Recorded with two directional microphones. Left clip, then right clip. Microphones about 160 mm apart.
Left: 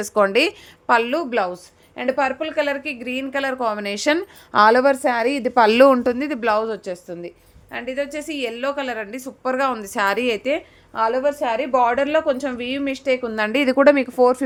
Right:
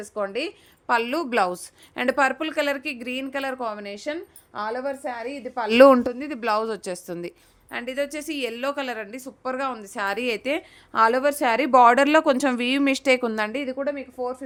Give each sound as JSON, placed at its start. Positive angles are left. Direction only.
{"t": 0.0, "sound": "a woman's voice", "side_deg": 25}
{"t": 1.0, "sound": "a woman's voice", "side_deg": -20}
{"t": 1.3, "sound": "a woman's voice", "side_deg": -35}
{"t": 3.9, "sound": "speech", "side_deg": 35}
{"t": 4.5, "sound": "a woman's voice", "side_deg": 55}
{"t": 5.7, "sound": "a woman's voice", "side_deg": 0}
{"t": 6.4, "sound": "a woman's voice", "side_deg": -10}
{"t": 6.7, "sound": "a woman's voice", "side_deg": -25}
{"t": 9.0, "sound": "a woman's voice", "side_deg": -5}
{"t": 10.2, "sound": "a woman's voice", "side_deg": -15}
{"t": 10.9, "sound": "a woman's voice", "side_deg": -55}
{"t": 13.7, "sound": "a woman's voice", "side_deg": 60}